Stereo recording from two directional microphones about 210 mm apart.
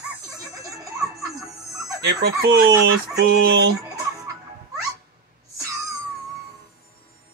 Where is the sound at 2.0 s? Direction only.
50° right (ahead or behind).